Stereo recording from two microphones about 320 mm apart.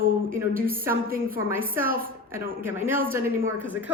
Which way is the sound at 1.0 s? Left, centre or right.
Right.